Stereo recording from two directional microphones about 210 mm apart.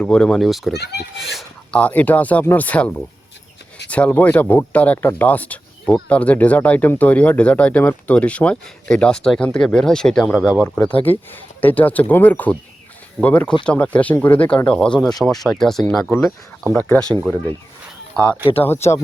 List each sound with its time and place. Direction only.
0.0 s speech: 5° left (ahead or behind)
0.7 s a child's voice: 50° left (ahead or behind)
1.2 s speech: centre (ahead or behind)